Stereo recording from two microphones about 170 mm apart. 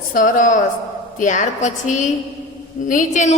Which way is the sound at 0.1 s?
50° left (ahead or behind).